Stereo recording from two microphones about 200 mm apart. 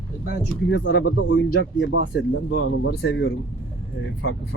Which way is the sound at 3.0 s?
85° left.